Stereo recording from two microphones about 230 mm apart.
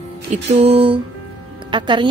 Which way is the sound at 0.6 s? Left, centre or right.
Right.